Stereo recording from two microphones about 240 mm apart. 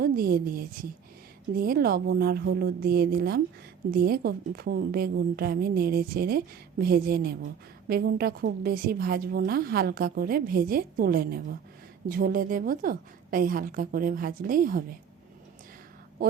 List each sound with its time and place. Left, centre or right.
0.0 s a woman's voice: right